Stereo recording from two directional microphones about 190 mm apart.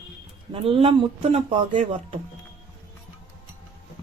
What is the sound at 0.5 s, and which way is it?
Dishes, 30° right (ahead or behind).